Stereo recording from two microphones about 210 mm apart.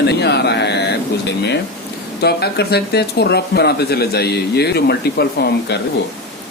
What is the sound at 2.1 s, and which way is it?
Speech, 50° left (ahead or behind).